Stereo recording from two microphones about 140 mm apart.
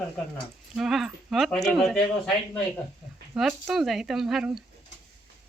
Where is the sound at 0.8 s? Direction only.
Centre (ahead or behind).